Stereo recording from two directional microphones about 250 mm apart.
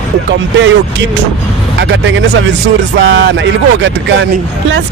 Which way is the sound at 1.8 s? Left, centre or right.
Right.